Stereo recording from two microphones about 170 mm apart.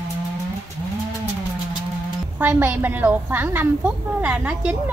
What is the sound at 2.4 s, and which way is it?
A woman's voice, 10° right (ahead or behind).